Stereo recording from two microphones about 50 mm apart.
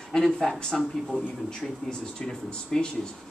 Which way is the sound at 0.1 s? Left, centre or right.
Centre.